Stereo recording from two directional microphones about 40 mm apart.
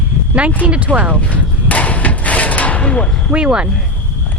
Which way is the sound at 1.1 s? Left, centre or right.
Left.